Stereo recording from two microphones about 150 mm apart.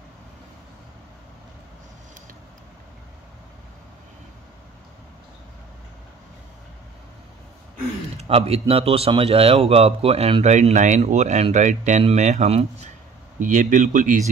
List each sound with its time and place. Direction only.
8.2 s speech: 40° right (ahead or behind)
13.4 s speech: 55° right (ahead or behind)